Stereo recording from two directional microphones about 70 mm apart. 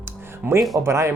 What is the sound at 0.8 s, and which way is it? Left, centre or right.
Speech, right.